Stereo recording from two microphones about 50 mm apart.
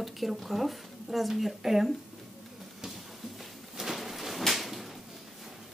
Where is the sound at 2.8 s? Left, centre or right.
Centre.